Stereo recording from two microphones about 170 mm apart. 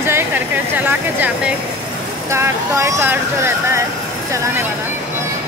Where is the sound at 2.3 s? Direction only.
15° right (ahead or behind).